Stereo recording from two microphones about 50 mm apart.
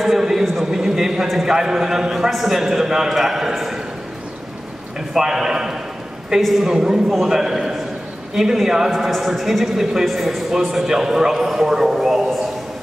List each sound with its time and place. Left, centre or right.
0.0 s a man's voice: centre
5.1 s a man's voice: centre
6.7 s a man's voice: centre